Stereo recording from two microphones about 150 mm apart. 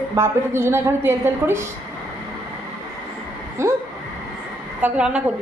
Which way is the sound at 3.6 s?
20° right (ahead or behind).